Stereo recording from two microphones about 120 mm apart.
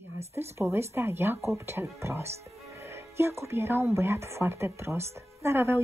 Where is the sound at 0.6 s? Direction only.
20° right (ahead or behind).